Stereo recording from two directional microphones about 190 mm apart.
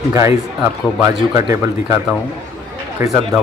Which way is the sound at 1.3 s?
15° right (ahead or behind).